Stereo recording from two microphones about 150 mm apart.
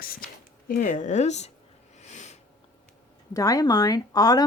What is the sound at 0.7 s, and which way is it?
Speech, 60° left (ahead or behind).